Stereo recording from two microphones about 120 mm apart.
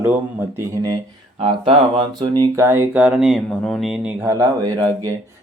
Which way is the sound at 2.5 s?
20° right (ahead or behind).